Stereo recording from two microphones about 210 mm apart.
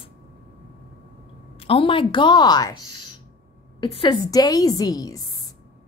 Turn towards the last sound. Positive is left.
turn(degrees=15)  # may be behind; listen again after turning